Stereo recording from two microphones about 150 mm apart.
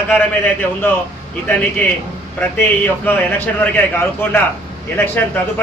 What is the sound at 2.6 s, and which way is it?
A man's voice, 15° left (ahead or behind).